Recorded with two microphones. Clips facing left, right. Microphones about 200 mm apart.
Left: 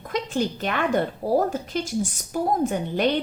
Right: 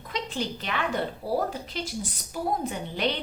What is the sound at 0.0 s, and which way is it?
A woman's voice, 50° left (ahead or behind).